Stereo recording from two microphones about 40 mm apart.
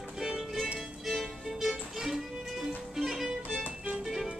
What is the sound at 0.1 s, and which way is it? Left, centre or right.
Music, centre.